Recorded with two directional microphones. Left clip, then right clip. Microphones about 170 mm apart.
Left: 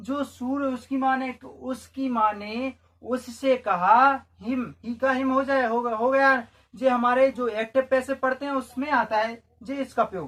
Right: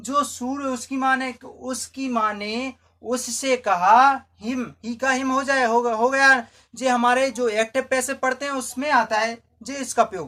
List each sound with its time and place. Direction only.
0.1 s speech: 30° right (ahead or behind)
3.1 s speech: 35° right (ahead or behind)